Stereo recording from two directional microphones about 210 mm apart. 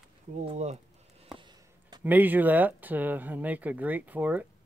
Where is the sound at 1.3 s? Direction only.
20° right (ahead or behind).